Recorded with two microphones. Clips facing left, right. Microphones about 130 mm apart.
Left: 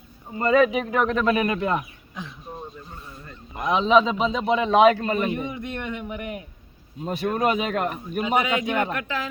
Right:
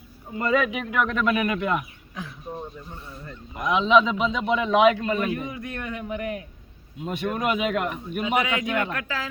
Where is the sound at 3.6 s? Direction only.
35° left (ahead or behind).